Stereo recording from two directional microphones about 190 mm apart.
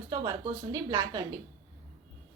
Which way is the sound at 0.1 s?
20° right (ahead or behind).